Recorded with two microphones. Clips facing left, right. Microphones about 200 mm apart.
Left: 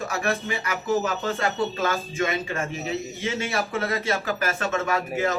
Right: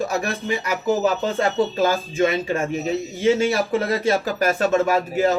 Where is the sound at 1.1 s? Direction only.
30° right (ahead or behind).